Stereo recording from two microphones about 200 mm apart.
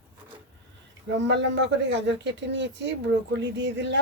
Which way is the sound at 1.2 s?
65° right (ahead or behind).